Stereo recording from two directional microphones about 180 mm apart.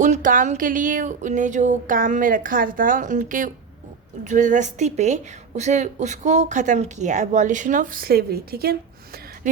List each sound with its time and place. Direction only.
0.0 s a woman's voice: 45° right (ahead or behind)